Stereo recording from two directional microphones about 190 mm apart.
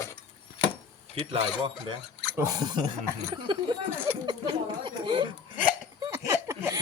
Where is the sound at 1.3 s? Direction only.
30° right (ahead or behind).